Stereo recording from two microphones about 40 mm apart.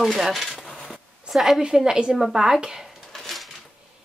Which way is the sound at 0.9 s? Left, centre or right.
Centre.